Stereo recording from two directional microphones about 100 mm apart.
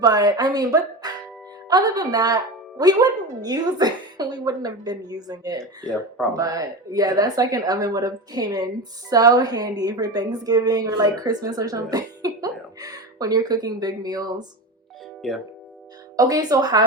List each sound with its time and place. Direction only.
0.0 s a woman's voice: 40° right (ahead or behind)
15.2 s speech: centre (ahead or behind)
16.1 s a woman's voice: 35° right (ahead or behind)